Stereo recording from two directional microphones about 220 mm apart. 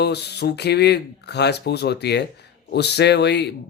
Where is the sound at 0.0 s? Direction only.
50° left (ahead or behind).